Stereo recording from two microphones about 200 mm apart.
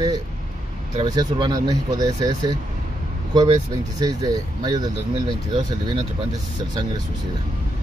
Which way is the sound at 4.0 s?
20° right (ahead or behind).